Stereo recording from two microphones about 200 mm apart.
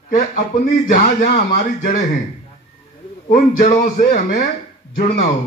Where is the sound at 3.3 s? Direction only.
40° left (ahead or behind).